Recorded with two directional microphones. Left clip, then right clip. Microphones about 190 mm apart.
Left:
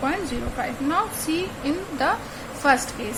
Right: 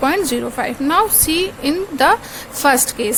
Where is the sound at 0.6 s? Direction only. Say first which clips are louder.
Right 8 dB; 60° right (ahead or behind).